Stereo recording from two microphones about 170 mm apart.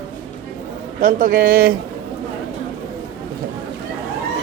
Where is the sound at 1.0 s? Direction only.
55° right (ahead or behind).